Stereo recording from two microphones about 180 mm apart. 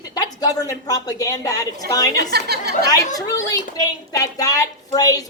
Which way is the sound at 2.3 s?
65° right (ahead or behind).